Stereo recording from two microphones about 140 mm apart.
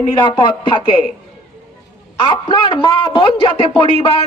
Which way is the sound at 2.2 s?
35° left (ahead or behind).